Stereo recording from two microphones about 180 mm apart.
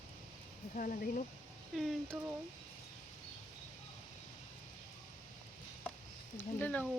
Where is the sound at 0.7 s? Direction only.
45° left (ahead or behind).